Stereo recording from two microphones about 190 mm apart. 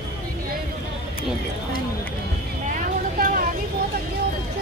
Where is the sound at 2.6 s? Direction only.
45° right (ahead or behind).